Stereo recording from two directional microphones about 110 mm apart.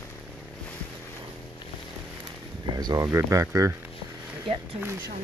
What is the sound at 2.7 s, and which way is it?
Speech, 35° right (ahead or behind).